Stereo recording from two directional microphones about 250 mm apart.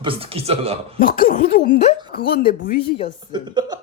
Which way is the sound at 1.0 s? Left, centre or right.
Left.